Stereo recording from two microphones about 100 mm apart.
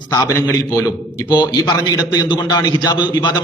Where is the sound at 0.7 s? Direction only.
35° left (ahead or behind).